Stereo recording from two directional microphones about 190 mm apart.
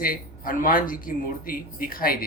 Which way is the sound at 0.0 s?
50° left (ahead or behind).